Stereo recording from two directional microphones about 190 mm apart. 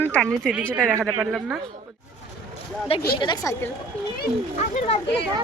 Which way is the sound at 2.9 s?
30° left (ahead or behind).